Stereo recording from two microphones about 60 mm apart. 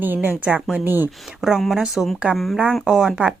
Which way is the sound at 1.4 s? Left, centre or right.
Centre.